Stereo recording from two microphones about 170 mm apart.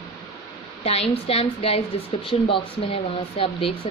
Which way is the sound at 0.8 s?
35° left (ahead or behind).